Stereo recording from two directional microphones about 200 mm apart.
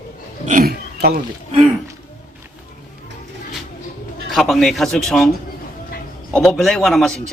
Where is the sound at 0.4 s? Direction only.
45° right (ahead or behind).